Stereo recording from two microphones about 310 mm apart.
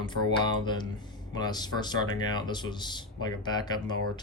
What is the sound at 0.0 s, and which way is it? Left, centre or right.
Speech, centre.